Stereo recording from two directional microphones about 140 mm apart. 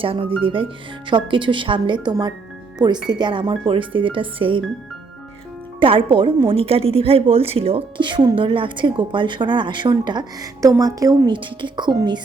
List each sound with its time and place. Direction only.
0.0 s speech: 40° right (ahead or behind)
5.8 s speech: 40° right (ahead or behind)